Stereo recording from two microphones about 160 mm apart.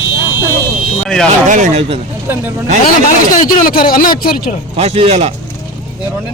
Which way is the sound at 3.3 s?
60° left (ahead or behind).